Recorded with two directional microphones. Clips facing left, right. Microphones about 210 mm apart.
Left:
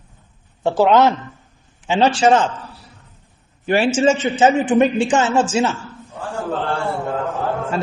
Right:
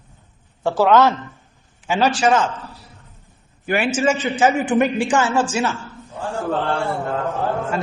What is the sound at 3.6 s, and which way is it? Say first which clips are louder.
A man's voice: left 3 dB; 30° left (ahead or behind).